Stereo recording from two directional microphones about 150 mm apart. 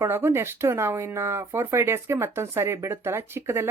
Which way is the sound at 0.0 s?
15° right (ahead or behind).